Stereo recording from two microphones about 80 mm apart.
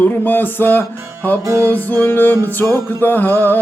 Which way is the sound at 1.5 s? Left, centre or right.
Right.